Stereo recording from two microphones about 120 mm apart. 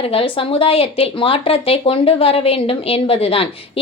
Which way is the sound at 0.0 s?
50° left (ahead or behind).